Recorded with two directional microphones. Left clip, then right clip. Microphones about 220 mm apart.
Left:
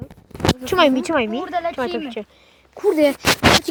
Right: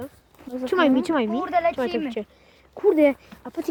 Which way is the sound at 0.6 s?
30° left (ahead or behind).